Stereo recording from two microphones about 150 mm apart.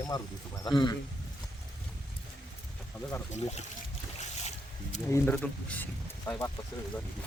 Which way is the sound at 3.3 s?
50° left (ahead or behind).